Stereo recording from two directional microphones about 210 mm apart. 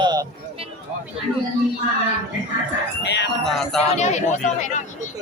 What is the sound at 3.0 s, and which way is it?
Speech, 55° left (ahead or behind).